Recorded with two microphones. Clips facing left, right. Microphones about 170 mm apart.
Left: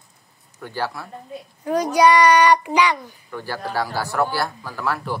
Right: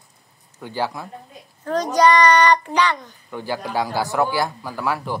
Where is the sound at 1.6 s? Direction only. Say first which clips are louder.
Left 1 dB; 10° left (ahead or behind).